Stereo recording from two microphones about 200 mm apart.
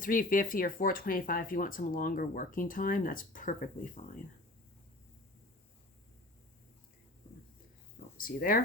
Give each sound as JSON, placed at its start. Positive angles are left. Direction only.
{"t": 0.0, "sound": "speech", "side_deg": 45}
{"t": 8.2, "sound": "speech", "side_deg": 45}